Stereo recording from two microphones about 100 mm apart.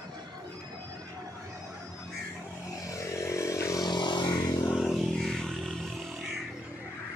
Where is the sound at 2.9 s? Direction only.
30° left (ahead or behind).